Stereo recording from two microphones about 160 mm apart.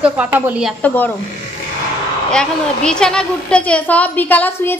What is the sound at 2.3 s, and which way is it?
A woman's voice, 5° left (ahead or behind).